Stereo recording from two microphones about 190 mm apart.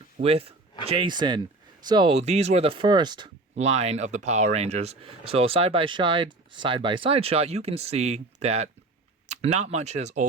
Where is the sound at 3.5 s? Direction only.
35° right (ahead or behind).